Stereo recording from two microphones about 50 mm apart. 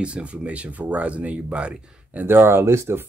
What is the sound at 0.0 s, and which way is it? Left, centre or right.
Speech, right.